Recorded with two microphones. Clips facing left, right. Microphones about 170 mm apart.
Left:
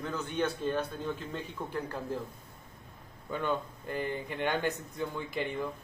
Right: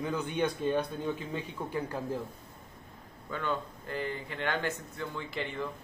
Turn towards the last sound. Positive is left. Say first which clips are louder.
# left 2 dB
turn(degrees=15)  # may be behind; listen again after turning